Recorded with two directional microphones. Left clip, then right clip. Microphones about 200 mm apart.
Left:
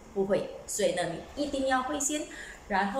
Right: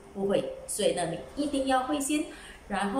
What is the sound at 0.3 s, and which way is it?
A woman's voice, 5° right (ahead or behind).